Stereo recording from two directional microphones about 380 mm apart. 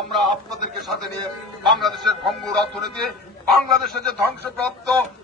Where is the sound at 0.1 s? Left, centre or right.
Centre.